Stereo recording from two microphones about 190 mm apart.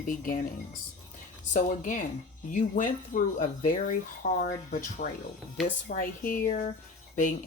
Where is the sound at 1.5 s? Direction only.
40° left (ahead or behind).